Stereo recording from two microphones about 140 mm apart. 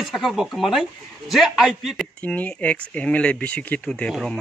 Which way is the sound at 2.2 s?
10° left (ahead or behind).